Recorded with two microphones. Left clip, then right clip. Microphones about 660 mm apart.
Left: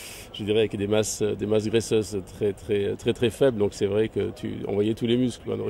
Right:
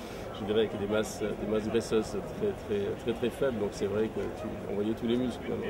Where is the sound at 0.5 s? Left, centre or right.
Left.